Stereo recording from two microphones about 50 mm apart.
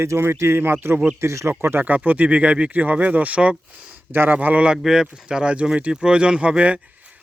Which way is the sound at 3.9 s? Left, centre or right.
Right.